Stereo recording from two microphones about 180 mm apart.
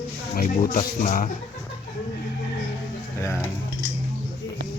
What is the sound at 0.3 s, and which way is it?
Speech, 45° left (ahead or behind).